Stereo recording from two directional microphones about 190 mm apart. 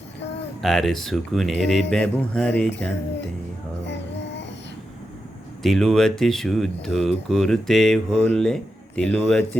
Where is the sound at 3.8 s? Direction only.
65° left (ahead or behind).